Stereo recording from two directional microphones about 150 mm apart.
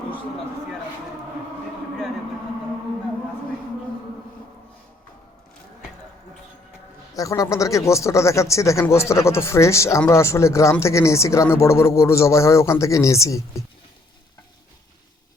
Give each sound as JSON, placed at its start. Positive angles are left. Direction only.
{"t": 7.1, "sound": "speech", "side_deg": 20}